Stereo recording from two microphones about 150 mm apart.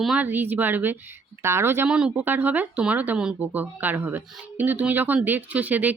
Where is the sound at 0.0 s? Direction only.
5° right (ahead or behind).